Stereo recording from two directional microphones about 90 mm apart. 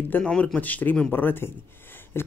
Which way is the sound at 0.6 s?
20° left (ahead or behind).